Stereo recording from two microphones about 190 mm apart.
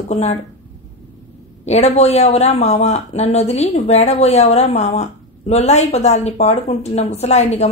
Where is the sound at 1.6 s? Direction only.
35° left (ahead or behind).